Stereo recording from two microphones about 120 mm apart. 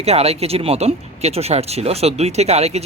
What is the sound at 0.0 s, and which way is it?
Speech, 60° right (ahead or behind).